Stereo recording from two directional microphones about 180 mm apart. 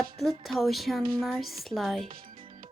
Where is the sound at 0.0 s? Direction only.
Centre (ahead or behind).